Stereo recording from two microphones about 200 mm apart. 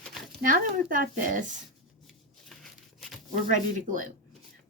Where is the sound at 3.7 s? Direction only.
40° right (ahead or behind).